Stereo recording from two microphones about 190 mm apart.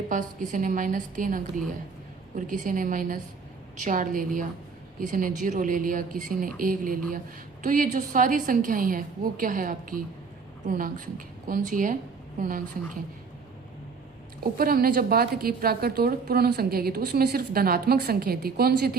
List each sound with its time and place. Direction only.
0.1 s a woman's voice: 45° right (ahead or behind)
14.6 s a woman's voice: 50° right (ahead or behind)